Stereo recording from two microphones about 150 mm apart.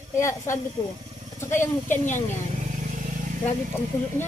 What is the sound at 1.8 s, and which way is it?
Speech, 55° left (ahead or behind).